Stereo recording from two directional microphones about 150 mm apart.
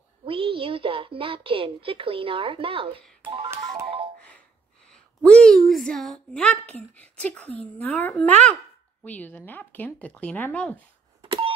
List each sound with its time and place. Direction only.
0.2 s a woman's voice: 35° right (ahead or behind)
4.8 s a woman's voice: 5° left (ahead or behind)